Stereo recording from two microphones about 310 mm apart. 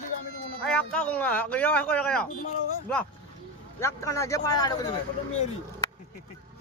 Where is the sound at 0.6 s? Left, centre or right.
Centre.